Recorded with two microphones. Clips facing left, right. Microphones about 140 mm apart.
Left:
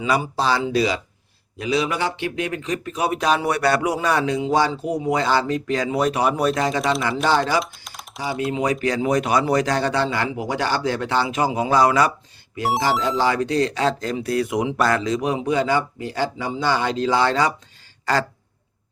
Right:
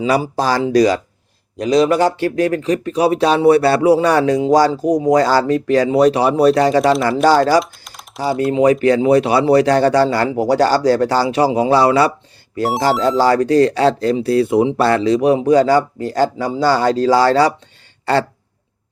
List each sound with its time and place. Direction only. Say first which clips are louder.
0.0 s speech: right 5 dB; 35° right (ahead or behind)
7.6 s typing: right 1 dB; centre (ahead or behind)
8.2 s speech: right 9 dB; 35° right (ahead or behind)
12.8 s speech: right 7 dB; 45° right (ahead or behind)
18.0 s a sound: right 5 dB; 30° right (ahead or behind)